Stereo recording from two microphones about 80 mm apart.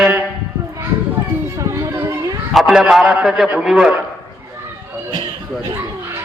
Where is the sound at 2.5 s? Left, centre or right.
Centre.